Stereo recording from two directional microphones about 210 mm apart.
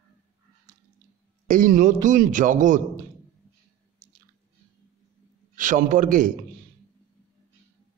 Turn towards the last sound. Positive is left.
turn(degrees=-40)  # may be behind; listen again after turning